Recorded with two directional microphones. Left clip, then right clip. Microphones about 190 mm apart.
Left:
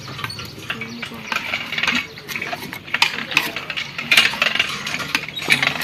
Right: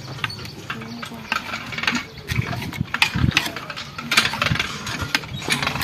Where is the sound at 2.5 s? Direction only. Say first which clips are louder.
Left 3 dB; 45° right (ahead or behind).